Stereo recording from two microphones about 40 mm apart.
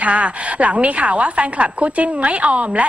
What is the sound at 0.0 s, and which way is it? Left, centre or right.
A woman's voice, right.